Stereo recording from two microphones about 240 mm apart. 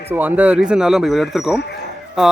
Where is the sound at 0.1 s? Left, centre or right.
Centre.